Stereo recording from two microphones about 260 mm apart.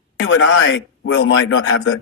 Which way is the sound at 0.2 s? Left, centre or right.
Left.